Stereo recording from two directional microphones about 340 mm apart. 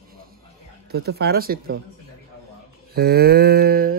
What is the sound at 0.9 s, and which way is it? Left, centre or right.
Speech, right.